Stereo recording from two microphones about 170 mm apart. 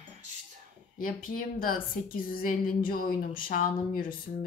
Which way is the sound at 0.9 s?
55° left (ahead or behind).